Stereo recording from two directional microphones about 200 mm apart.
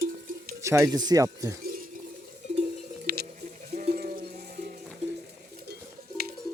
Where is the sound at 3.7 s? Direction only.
45° right (ahead or behind).